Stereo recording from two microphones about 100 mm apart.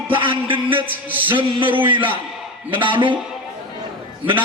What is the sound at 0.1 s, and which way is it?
A man's voice, 60° right (ahead or behind).